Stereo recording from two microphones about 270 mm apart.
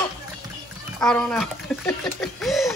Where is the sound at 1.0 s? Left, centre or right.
Centre.